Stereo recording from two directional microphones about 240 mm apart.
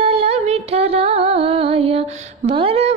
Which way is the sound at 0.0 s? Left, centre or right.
Right.